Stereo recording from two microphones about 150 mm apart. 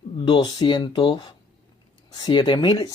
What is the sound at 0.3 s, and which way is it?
Speech, 25° left (ahead or behind).